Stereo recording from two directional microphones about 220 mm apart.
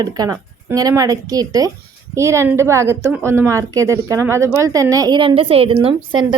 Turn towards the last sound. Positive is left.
turn(degrees=-25)  # may be behind; listen again after turning